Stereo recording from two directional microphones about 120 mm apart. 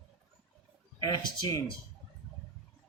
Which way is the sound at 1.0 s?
35° left (ahead or behind).